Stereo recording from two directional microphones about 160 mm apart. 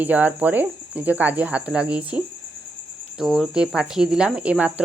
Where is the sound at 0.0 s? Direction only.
10° right (ahead or behind).